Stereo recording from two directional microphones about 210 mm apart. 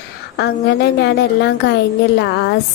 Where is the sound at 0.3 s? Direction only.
50° left (ahead or behind).